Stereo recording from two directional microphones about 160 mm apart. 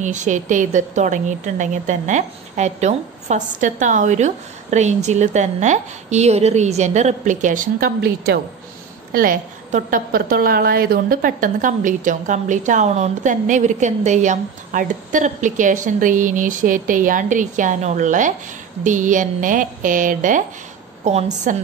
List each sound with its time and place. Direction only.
0.0 s a woman's voice: 50° right (ahead or behind); by 8.4 s 75° right (ahead or behind)
9.1 s a woman's voice: 60° right (ahead or behind); by 21.5 s 45° right (ahead or behind)